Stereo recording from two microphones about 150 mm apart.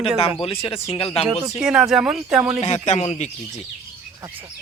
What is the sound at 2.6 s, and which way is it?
Speech, 50° left (ahead or behind).